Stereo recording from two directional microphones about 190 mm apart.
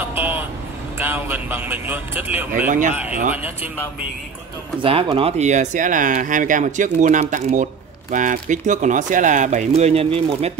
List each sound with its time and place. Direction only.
0.1 s vehicle: 10° right (ahead or behind)
0.9 s speech: 10° right (ahead or behind)
4.7 s speech: 30° right (ahead or behind)